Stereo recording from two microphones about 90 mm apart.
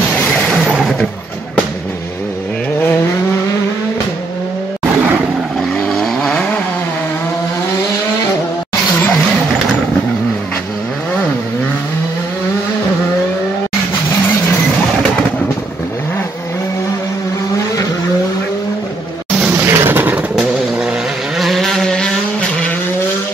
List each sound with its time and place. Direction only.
5.9 s vehicle: 10° left (ahead or behind)
19.5 s vehicle: 25° right (ahead or behind)
21.4 s vehicle: centre (ahead or behind)